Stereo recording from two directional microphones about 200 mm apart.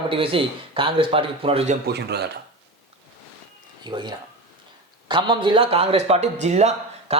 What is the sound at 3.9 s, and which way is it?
Speech, 25° right (ahead or behind).